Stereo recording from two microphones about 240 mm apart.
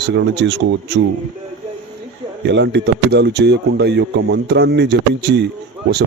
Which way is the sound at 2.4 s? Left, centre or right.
Right.